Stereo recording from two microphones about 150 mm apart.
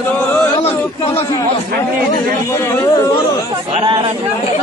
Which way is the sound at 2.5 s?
20° left (ahead or behind).